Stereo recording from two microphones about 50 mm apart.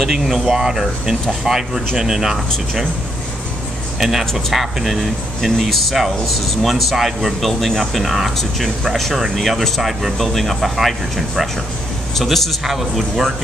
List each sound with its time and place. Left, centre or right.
0.0 s speech: centre
4.0 s speech: centre